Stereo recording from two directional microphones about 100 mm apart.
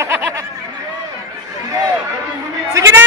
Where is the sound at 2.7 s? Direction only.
30° right (ahead or behind).